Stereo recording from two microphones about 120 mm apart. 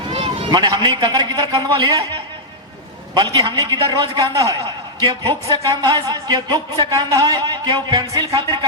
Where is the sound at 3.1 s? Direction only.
35° right (ahead or behind).